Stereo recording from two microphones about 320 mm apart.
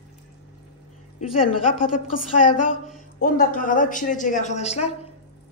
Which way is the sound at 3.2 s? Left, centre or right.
Left.